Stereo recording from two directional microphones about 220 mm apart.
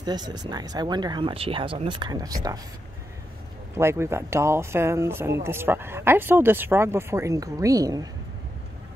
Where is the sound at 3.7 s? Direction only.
10° right (ahead or behind).